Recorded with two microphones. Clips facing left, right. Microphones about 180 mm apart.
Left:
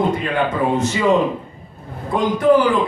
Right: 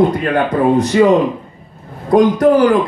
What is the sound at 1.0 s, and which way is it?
Speech, 55° right (ahead or behind).